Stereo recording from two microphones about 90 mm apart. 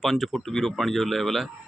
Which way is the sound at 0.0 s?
Centre (ahead or behind).